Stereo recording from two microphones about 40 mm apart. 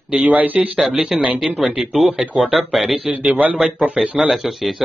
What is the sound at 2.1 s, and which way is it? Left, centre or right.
Speech, centre.